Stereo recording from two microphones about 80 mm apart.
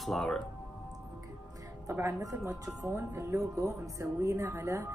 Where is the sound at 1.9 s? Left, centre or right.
Right.